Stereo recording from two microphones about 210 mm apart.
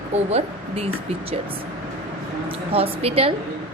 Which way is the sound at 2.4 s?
25° right (ahead or behind).